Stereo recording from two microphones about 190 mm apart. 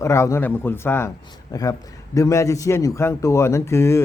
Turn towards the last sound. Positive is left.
turn(degrees=15)  # may be behind; listen again after turning